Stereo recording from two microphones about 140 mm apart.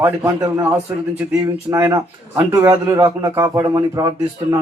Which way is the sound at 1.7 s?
20° right (ahead or behind).